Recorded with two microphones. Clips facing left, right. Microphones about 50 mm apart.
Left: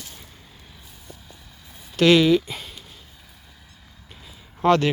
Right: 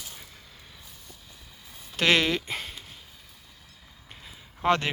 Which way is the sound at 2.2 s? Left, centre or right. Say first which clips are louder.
Left 9 dB; right.